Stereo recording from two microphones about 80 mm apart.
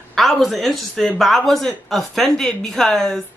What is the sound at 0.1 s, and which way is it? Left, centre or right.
Speech, centre.